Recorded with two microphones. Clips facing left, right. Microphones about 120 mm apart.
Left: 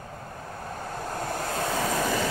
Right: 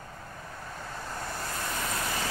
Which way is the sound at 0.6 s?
50° left (ahead or behind).